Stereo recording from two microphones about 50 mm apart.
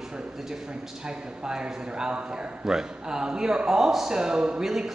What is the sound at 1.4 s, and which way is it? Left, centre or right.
Speech, centre.